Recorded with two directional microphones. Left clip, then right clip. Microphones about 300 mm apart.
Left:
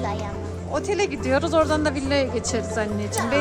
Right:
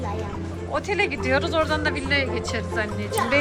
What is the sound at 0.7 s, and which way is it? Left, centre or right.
Speech, centre.